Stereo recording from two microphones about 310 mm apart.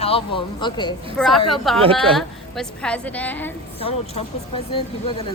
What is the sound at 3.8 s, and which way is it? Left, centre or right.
Speech, centre.